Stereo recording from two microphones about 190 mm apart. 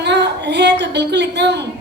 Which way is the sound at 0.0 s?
65° right (ahead or behind).